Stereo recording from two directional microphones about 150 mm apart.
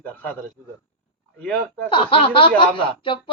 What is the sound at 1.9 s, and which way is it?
Speech, 35° left (ahead or behind).